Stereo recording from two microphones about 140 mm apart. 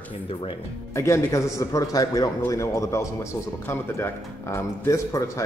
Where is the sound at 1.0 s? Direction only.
20° left (ahead or behind).